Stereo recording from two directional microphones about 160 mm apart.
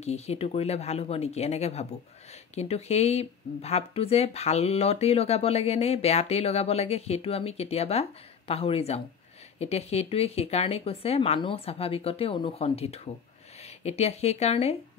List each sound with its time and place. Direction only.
0.0 s speech: 40° left (ahead or behind)